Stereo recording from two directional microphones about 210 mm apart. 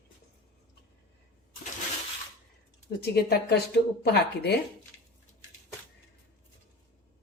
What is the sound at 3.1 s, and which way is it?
A woman's voice, 50° left (ahead or behind).